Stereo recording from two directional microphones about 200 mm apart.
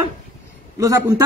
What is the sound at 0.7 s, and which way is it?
Speech, 15° right (ahead or behind).